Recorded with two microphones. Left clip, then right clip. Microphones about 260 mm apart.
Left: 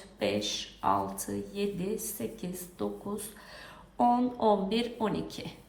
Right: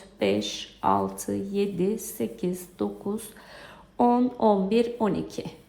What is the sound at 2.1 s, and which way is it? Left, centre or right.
Speech, right.